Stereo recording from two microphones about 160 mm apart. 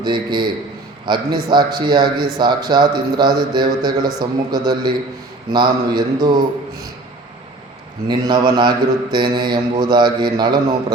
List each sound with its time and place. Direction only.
0.0 s a man's voice: 30° right (ahead or behind)
8.0 s a man's voice: 30° right (ahead or behind)